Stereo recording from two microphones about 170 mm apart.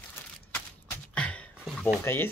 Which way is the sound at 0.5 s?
10° left (ahead or behind).